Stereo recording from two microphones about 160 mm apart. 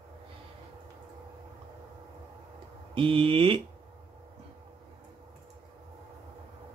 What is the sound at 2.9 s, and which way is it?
Speech, 35° right (ahead or behind).